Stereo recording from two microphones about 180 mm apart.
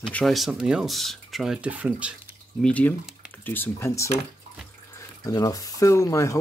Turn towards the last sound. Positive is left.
turn(degrees=15)  # may be behind; listen again after turning